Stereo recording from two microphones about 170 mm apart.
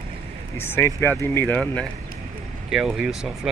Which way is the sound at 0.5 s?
15° left (ahead or behind).